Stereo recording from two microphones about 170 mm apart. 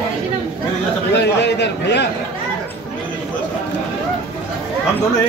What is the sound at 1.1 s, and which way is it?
Speech, 90° left.